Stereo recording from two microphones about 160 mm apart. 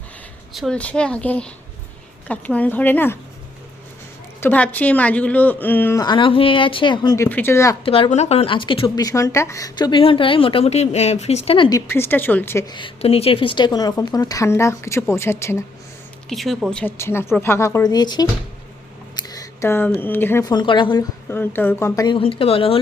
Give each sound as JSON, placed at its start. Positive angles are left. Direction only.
{"t": 0.5, "sound": "a woman's voice", "side_deg": 5}
{"t": 4.4, "sound": "a woman's voice", "side_deg": 10}
{"t": 6.1, "sound": "a woman's voice", "side_deg": 30}
{"t": 7.2, "sound": "a woman's voice", "side_deg": 10}
{"t": 7.9, "sound": "a woman's voice", "side_deg": 35}
{"t": 9.0, "sound": "a woman's voice", "side_deg": 20}
{"t": 11.9, "sound": "a woman's voice", "side_deg": 15}
{"t": 12.7, "sound": "a woman's voice", "side_deg": 35}
{"t": 16.3, "sound": "a woman's voice", "side_deg": 0}
{"t": 21.2, "sound": "a woman's voice", "side_deg": 15}
{"t": 22.0, "sound": "a woman's voice", "side_deg": 35}